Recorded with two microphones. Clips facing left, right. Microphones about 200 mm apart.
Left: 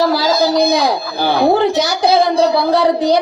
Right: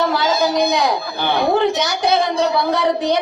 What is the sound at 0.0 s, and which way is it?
A man's voice, 35° left (ahead or behind).